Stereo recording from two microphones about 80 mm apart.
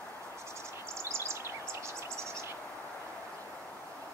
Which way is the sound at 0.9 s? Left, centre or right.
Right.